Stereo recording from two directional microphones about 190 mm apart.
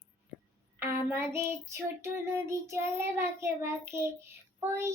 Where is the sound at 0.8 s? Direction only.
10° right (ahead or behind).